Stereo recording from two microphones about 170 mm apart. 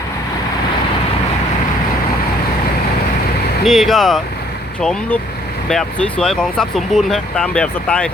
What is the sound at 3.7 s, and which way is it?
Speech, centre (ahead or behind).